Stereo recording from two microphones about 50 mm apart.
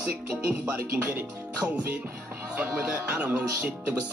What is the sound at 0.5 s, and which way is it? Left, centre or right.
Music, right.